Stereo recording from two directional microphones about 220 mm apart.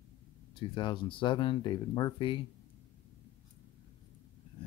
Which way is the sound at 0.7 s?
20° left (ahead or behind).